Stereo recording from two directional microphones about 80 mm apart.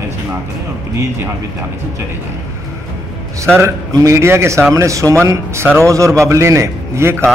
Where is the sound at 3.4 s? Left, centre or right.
Right.